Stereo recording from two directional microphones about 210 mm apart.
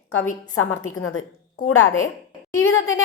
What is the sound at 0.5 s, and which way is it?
A woman's voice, 80° left.